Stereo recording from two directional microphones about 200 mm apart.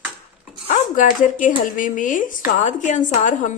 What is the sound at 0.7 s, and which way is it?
A woman's voice, 40° left (ahead or behind).